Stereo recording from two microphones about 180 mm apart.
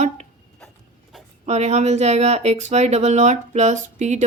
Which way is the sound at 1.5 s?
40° right (ahead or behind).